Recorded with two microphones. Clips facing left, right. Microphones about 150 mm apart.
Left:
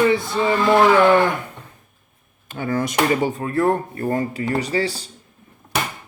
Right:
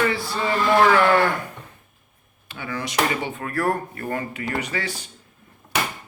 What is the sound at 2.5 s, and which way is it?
Speech, 45° left (ahead or behind).